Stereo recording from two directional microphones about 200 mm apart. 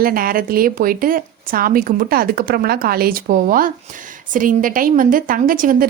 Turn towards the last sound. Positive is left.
turn(degrees=-45)  # may be behind; listen again after turning